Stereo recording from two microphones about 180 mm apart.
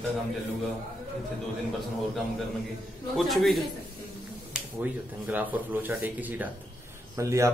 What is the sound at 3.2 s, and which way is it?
Speech, centre (ahead or behind).